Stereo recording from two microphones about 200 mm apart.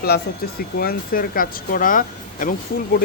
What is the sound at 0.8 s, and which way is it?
Speech, 45° left (ahead or behind).